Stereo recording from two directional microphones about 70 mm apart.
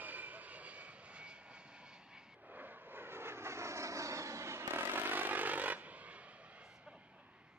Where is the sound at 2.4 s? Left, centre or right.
Right.